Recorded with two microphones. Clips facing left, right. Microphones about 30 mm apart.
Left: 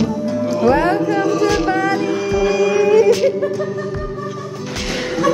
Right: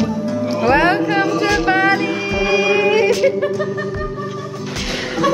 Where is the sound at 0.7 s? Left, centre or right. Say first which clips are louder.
Right 1 dB; right.